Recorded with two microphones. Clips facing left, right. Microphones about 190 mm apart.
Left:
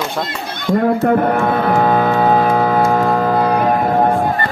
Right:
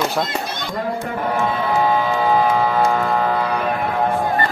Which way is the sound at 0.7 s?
55° left (ahead or behind).